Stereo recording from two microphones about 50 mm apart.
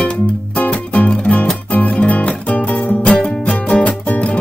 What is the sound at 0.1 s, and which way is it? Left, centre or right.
Music, left.